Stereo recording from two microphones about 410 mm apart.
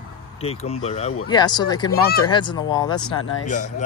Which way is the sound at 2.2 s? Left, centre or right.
Centre.